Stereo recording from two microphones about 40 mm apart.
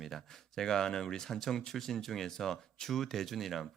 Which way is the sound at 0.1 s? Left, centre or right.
Centre.